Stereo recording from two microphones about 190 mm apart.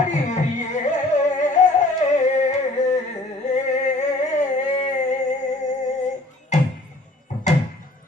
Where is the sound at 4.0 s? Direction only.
40° left (ahead or behind).